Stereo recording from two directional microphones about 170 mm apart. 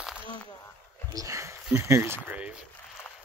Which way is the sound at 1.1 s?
20° right (ahead or behind).